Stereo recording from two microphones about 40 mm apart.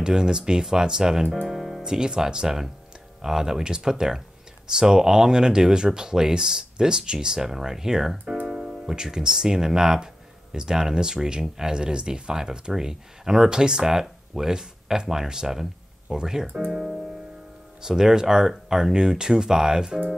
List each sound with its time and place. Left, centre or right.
0.0 s speech: centre
1.5 s music: centre
1.8 s speech: centre
16.7 s keyboard: centre
17.8 s speech: centre